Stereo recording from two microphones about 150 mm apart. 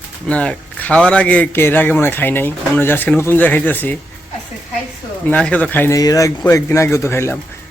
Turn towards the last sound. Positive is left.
turn(degrees=15)  # may be behind; listen again after turning